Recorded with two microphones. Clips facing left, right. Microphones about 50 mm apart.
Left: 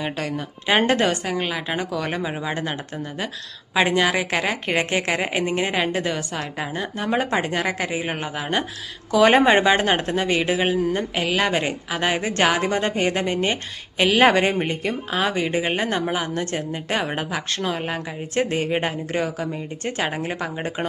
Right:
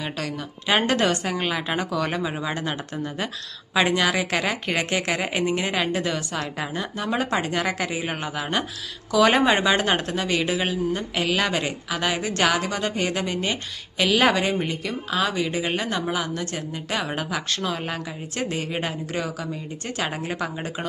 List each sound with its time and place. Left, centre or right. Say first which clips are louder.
0.0 s a woman's voice: left 3 dB; centre
9.1 s speech: left 3 dB; left
18.4 s speech: left 4 dB; left
20.1 s a woman's voice: left 2 dB; centre
20.6 s speech: left 3 dB; left